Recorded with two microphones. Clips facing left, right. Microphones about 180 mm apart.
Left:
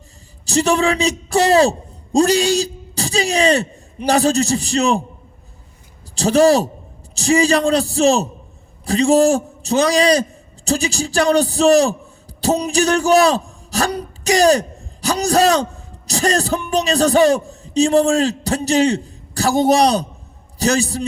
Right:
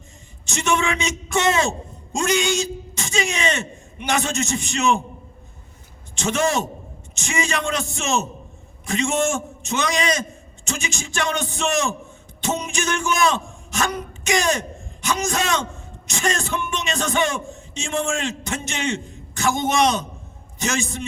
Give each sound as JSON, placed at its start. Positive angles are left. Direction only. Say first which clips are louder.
{"t": 0.4, "sound": "a man's voice", "louder": "left 6 dB", "side_deg": 35}
{"t": 6.1, "sound": "a man's voice", "louder": "left 9 dB", "side_deg": 35}